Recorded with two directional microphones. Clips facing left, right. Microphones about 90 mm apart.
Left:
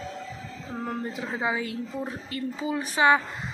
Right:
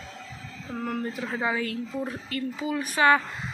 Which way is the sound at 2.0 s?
30° left (ahead or behind).